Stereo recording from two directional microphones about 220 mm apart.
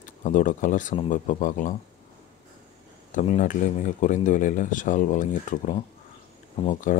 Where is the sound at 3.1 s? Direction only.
35° left (ahead or behind).